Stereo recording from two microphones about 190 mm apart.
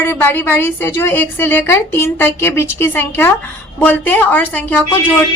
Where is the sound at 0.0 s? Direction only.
10° left (ahead or behind).